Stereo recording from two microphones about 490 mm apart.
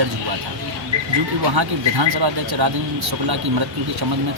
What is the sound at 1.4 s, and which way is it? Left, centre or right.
Speech, right.